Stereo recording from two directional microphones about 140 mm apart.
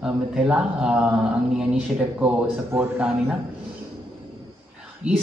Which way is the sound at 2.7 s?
20° right (ahead or behind).